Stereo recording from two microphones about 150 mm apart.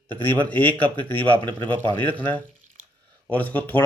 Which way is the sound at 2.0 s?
10° left (ahead or behind).